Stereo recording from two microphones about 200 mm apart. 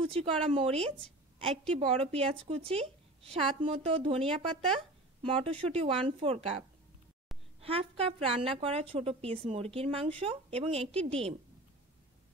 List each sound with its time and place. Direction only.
0.1 s a woman's voice: 25° right (ahead or behind)
7.6 s a woman's voice: 30° right (ahead or behind)